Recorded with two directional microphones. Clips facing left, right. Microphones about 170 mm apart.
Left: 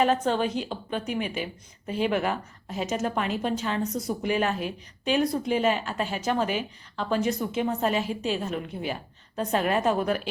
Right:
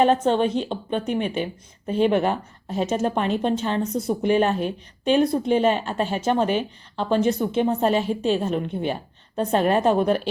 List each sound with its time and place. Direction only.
0.0 s a woman's voice: 25° right (ahead or behind)